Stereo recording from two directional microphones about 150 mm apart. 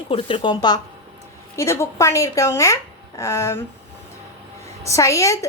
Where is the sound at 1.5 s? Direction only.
20° left (ahead or behind).